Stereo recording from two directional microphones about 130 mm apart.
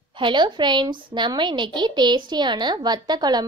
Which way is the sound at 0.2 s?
35° right (ahead or behind).